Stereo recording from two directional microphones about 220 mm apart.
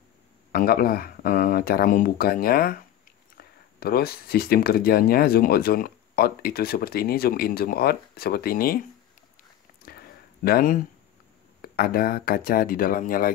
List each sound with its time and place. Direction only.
0.5 s speech: 40° left (ahead or behind)
9.8 s a sound: 45° left (ahead or behind)
11.6 s speech: 45° left (ahead or behind)